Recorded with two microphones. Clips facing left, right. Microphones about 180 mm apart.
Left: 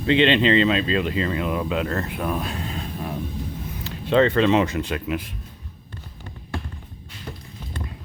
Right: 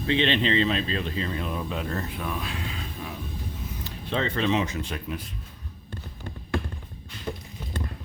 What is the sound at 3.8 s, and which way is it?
Speech, 80° left.